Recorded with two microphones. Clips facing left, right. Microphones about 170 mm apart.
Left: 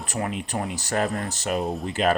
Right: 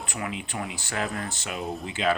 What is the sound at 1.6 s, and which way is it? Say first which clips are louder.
Speech: left 4 dB; centre (ahead or behind).